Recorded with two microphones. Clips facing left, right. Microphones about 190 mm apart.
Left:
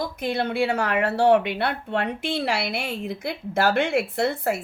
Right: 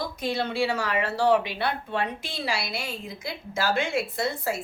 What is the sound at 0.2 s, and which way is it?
A woman's voice, 55° left (ahead or behind).